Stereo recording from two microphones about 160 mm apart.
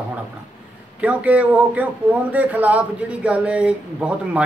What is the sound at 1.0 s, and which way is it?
A man's voice, 10° right (ahead or behind).